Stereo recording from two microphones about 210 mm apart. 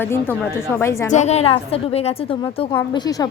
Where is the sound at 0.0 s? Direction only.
10° left (ahead or behind).